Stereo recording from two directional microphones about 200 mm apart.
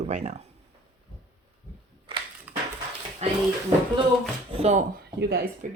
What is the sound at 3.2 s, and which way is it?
Speech, 35° right (ahead or behind).